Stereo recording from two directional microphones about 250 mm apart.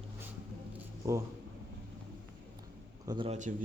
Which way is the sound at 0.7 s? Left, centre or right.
Centre.